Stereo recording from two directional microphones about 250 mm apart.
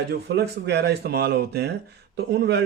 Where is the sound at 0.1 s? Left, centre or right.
Right.